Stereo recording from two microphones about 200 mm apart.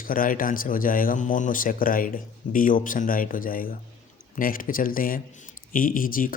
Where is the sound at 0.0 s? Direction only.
45° left (ahead or behind).